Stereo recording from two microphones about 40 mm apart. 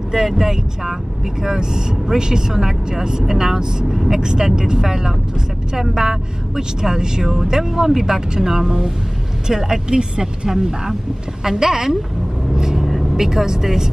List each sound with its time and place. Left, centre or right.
0.1 s speech: centre
12.5 s vehicle: centre
13.1 s speech: centre